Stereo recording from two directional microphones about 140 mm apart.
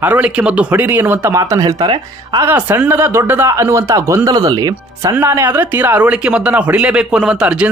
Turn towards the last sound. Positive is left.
turn(degrees=-5)  # may be behind; listen again after turning